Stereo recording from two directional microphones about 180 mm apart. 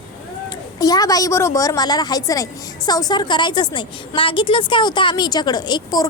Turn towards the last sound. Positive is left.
turn(degrees=25)  # may be behind; listen again after turning